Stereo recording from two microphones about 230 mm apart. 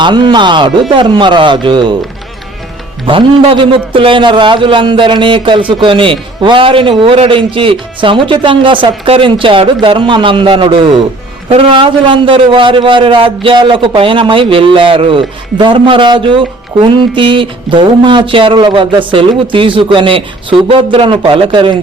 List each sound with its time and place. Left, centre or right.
0.0 s a man's voice: centre
3.1 s a man's voice: right